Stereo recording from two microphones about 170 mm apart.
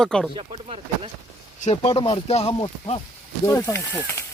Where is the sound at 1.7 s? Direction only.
30° left (ahead or behind).